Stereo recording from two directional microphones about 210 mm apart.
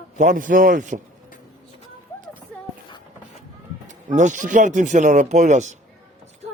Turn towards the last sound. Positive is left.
turn(degrees=-35)  # may be behind; listen again after turning